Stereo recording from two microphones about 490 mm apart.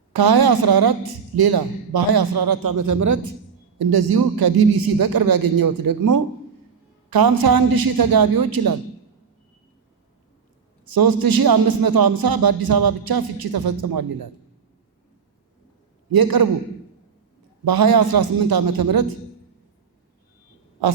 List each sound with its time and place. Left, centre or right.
0.1 s a man's voice: right
3.8 s a man's voice: right
10.8 s a man's voice: right
16.1 s a man's voice: right
17.7 s a man's voice: right